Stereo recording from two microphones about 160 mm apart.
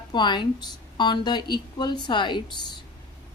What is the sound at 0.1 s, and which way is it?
A woman's voice, 30° left (ahead or behind).